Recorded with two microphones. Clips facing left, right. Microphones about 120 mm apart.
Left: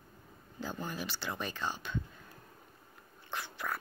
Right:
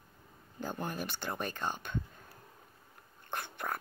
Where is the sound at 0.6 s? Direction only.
55° right (ahead or behind).